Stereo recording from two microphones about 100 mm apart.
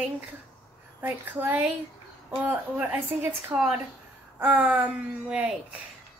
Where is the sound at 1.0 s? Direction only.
15° right (ahead or behind).